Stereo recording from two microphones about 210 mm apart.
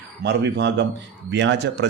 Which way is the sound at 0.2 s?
50° right (ahead or behind).